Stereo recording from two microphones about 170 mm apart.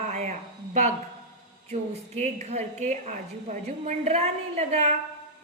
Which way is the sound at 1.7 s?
45° right (ahead or behind).